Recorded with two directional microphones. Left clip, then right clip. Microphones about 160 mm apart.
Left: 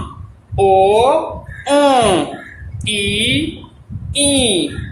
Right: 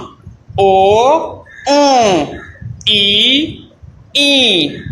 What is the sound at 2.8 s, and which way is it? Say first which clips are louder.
A woman's voice: right 7 dB; 30° right (ahead or behind).